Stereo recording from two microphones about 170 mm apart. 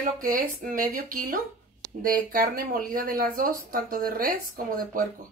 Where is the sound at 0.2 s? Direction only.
55° right (ahead or behind).